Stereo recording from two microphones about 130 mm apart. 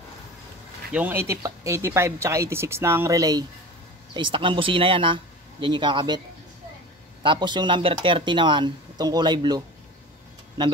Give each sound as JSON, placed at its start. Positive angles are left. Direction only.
{"t": 0.9, "sound": "speech", "side_deg": -15}
{"t": 4.1, "sound": "speech", "side_deg": -40}
{"t": 7.2, "sound": "speech", "side_deg": -35}